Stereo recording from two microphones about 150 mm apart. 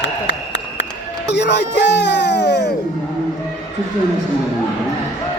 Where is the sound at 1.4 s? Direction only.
90° left.